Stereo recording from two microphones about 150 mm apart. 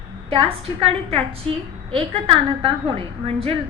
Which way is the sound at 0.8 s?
40° right (ahead or behind).